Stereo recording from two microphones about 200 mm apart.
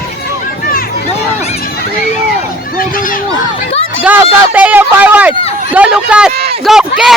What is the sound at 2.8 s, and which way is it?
Speech, 45° left (ahead or behind).